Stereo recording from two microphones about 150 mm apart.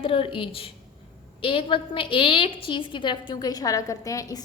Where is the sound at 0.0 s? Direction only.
35° left (ahead or behind).